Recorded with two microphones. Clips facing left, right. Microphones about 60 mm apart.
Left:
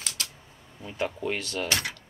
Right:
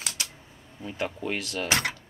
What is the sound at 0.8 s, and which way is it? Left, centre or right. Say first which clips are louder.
Speech: left 1 dB; centre.